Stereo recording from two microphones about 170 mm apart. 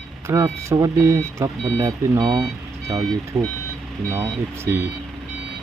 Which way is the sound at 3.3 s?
15° right (ahead or behind).